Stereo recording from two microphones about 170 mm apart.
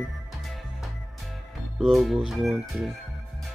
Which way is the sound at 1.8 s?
Centre (ahead or behind).